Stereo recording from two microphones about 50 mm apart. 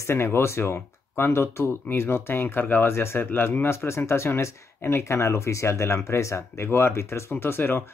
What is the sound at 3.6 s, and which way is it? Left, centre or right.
Speech, left.